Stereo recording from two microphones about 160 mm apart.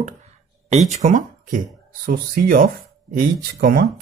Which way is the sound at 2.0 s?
65° right (ahead or behind).